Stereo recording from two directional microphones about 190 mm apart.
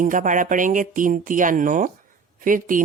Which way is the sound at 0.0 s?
45° right (ahead or behind).